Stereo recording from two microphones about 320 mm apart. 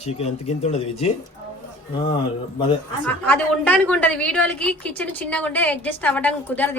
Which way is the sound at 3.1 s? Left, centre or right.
Centre.